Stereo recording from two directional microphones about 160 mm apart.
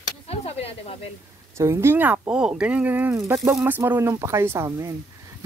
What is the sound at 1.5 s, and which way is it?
Speech, 15° right (ahead or behind).